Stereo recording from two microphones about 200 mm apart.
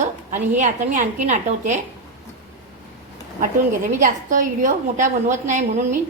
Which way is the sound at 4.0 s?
40° right (ahead or behind).